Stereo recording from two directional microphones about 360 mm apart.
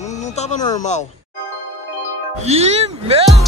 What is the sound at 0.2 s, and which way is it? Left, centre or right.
Speech, centre.